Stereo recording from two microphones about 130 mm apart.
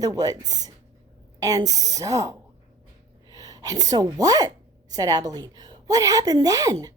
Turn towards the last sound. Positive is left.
turn(degrees=-25)  # may be behind; listen again after turning